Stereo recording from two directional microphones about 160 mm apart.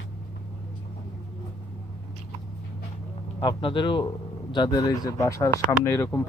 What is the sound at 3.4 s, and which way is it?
Speech, 30° left (ahead or behind).